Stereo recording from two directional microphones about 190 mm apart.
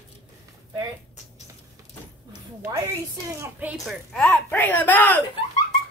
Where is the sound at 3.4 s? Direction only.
10° right (ahead or behind).